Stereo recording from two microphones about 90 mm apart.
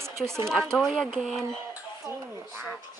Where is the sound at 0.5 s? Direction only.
5° left (ahead or behind).